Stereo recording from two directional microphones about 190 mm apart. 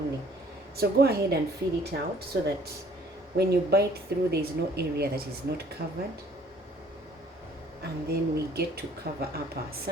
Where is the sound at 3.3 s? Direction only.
60° right (ahead or behind).